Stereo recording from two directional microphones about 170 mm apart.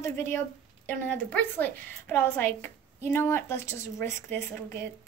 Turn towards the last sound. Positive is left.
turn(degrees=15)  # may be behind; listen again after turning